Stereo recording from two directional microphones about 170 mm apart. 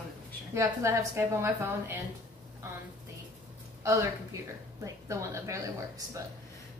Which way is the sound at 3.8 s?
15° right (ahead or behind).